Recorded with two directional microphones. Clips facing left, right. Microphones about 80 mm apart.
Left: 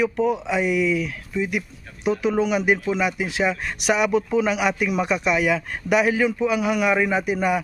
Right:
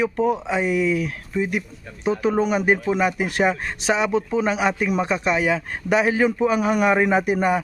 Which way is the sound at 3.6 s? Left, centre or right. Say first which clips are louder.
Left 1 dB; right.